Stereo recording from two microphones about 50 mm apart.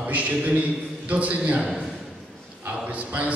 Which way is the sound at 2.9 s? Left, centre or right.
Right.